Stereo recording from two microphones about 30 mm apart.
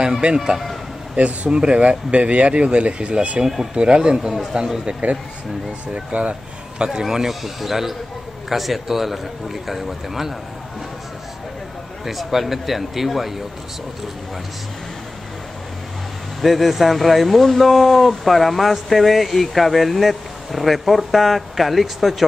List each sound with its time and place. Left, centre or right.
0.2 s speech: right
1.1 s speech: right
6.1 s speech: right
6.9 s a man's voice: centre
7.2 s a man's voice: centre
12.0 s speech: centre
16.3 s speech: centre